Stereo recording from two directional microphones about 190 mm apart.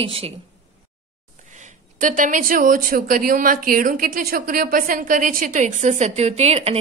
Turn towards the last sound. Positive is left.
turn(degrees=-35)  # may be behind; listen again after turning